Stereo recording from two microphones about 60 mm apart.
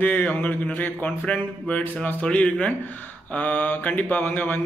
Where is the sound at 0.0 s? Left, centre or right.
Left.